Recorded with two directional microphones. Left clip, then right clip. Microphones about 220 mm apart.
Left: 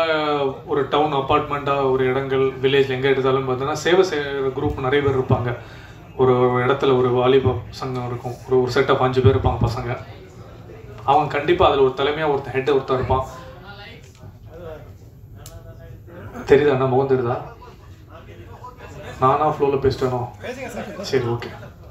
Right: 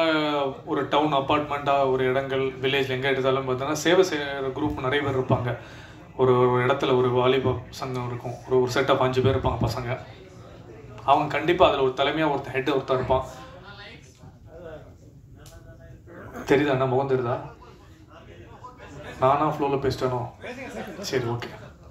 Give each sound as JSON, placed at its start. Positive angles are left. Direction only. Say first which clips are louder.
{"t": 0.0, "sound": "speech", "louder": "left 4 dB", "side_deg": -50}
{"t": 11.1, "sound": "speech", "louder": "left 4 dB", "side_deg": -50}
{"t": 16.4, "sound": "speech", "louder": "left 6 dB", "side_deg": -50}
{"t": 19.1, "sound": "speech", "louder": "left 4 dB", "side_deg": -50}